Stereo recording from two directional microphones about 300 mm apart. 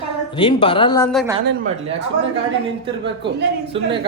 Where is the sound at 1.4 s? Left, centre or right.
Right.